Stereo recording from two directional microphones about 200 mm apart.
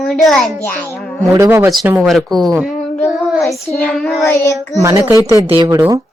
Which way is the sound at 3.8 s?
5° left (ahead or behind).